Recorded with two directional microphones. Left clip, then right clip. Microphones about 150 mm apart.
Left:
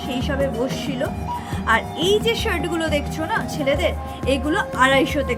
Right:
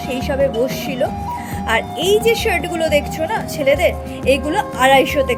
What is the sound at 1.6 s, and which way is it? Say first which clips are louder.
Speech: right 2 dB; 20° right (ahead or behind).